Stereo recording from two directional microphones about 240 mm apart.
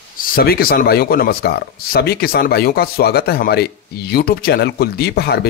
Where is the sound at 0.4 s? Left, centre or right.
Left.